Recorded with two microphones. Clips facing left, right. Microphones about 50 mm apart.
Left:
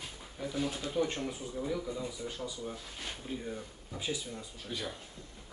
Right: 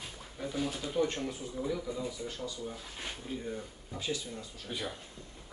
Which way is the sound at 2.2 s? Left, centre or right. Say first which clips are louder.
Even; centre.